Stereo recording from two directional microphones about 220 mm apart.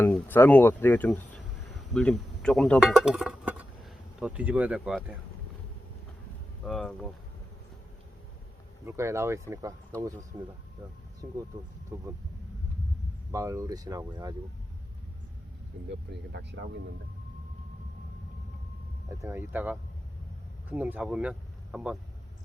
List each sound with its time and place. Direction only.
0.1 s speech: 10° left (ahead or behind)
6.7 s speech: centre (ahead or behind)
8.9 s speech: 10° right (ahead or behind)
11.5 s speech: 20° right (ahead or behind)
13.3 s speech: 15° right (ahead or behind)
15.9 s speech: 50° right (ahead or behind)
19.2 s speech: 10° right (ahead or behind)